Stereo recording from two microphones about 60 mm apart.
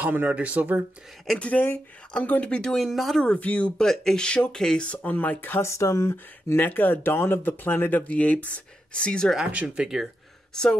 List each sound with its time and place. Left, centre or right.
0.0 s speech: right
1.4 s speech: left
2.8 s speech: centre
3.3 s speech: left
3.7 s speech: centre
4.8 s speech: left
5.6 s speech: left
6.5 s speech: left; by 9.3 s centre
9.4 s speech: centre
10.5 s speech: centre